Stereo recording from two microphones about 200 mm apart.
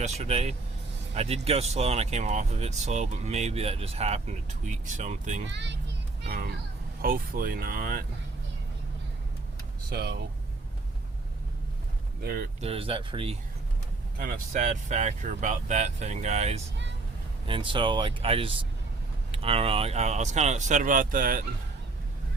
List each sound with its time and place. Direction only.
0.0 s speech: 35° right (ahead or behind)
5.5 s children playing: 60° right (ahead or behind)
7.0 s speech: 45° right (ahead or behind)
9.9 s speech: 50° right (ahead or behind)
12.2 s speech: 50° right (ahead or behind)
12.5 s speech: 30° right (ahead or behind)
14.2 s speech: 40° right (ahead or behind)